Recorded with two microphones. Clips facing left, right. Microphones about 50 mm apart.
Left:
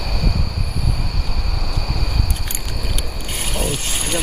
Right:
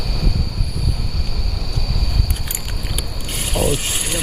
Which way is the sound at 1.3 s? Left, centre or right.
Left.